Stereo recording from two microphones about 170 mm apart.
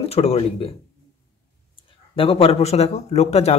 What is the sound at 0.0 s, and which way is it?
Speech, 35° left (ahead or behind).